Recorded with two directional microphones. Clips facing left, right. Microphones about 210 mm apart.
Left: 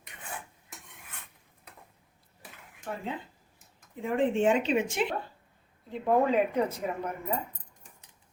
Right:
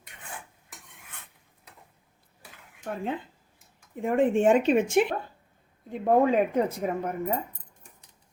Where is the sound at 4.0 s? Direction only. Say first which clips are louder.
Right 4 dB; 50° right (ahead or behind).